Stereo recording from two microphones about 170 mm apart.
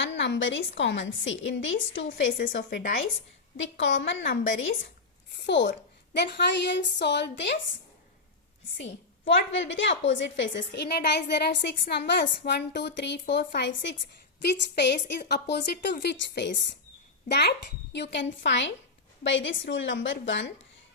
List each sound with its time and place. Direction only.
0.2 s a woman's voice: 90° left; by 3.1 s 65° left (ahead or behind)
3.6 s a woman's voice: 90° left
8.8 s a woman's voice: 90° left; by 16.0 s 75° left (ahead or behind)
16.0 s a woman's voice: 85° left
17.2 s a child's voice: 75° left (ahead or behind)
17.9 s a woman's voice: 90° left